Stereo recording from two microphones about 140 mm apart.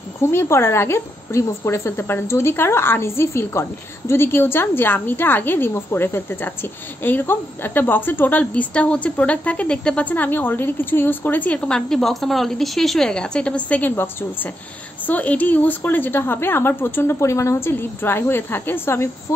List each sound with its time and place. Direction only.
0.2 s a woman's voice: 20° left (ahead or behind)